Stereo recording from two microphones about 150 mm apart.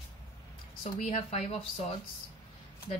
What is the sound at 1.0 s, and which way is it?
Speech, 50° left (ahead or behind).